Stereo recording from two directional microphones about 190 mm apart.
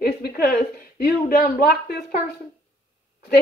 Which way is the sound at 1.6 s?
55° left (ahead or behind).